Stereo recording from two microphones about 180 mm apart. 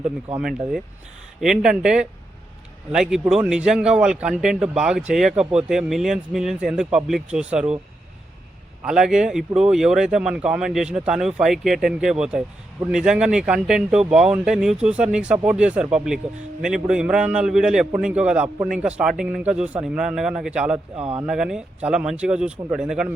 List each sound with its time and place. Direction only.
0.3 s speech: 5° right (ahead or behind)
8.8 s speech: 5° right (ahead or behind)
20.9 s speech: 35° right (ahead or behind)
21.2 s speech: 5° right (ahead or behind)